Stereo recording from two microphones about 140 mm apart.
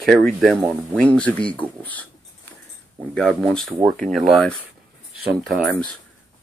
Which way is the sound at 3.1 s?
5° left (ahead or behind).